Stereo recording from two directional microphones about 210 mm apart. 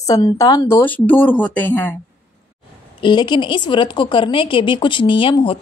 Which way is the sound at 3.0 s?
20° left (ahead or behind).